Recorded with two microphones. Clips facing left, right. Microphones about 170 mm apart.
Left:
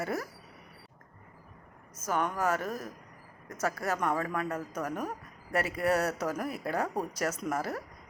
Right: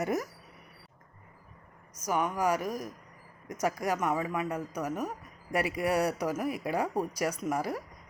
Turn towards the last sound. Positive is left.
turn(degrees=-10)  # may be behind; listen again after turning